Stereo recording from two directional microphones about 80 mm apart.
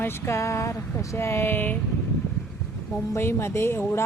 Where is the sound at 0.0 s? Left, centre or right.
Left.